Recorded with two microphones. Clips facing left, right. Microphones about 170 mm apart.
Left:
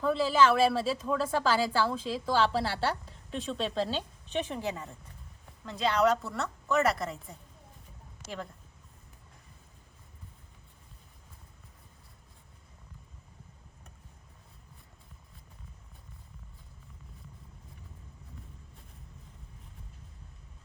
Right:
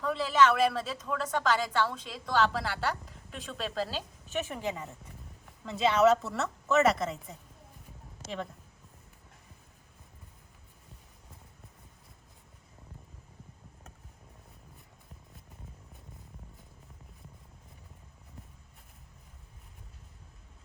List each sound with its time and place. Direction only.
0.0 s a woman's voice: 30° left (ahead or behind)
3.4 s a woman's voice: centre (ahead or behind)